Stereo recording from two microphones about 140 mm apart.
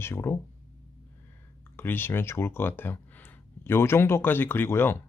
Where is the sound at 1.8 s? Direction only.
15° left (ahead or behind).